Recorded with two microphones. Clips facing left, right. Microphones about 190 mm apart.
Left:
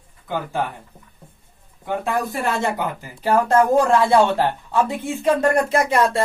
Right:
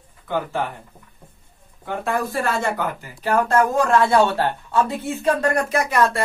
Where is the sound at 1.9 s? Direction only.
15° left (ahead or behind).